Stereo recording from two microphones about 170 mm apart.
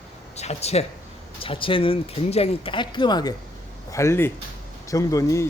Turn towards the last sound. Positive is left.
turn(degrees=20)  # may be behind; listen again after turning